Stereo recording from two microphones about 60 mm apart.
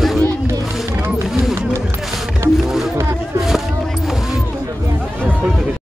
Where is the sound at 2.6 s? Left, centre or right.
Centre.